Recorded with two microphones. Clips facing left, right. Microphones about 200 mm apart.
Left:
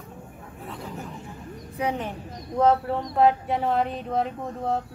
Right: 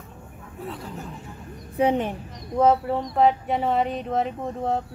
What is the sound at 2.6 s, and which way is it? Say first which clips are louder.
A man's voice: right 1 dB; 5° right (ahead or behind).